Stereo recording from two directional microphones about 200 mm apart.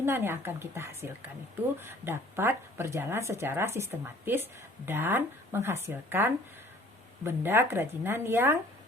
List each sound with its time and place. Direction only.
0.0 s speech: 10° right (ahead or behind)